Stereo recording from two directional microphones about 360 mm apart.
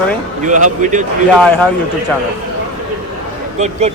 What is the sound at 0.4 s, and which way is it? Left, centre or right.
Speech, right.